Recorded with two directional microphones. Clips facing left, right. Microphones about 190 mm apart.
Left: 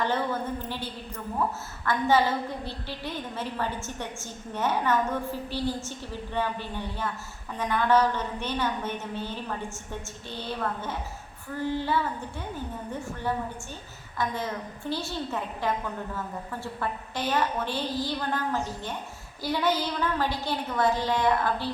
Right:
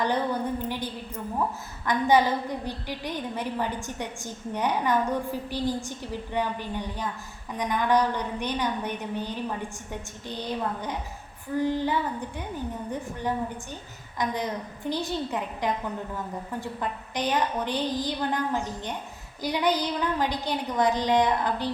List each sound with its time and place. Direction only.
0.0 s a woman's voice: 15° right (ahead or behind)